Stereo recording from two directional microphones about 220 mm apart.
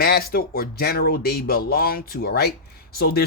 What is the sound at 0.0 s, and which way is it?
Speech, 45° left (ahead or behind).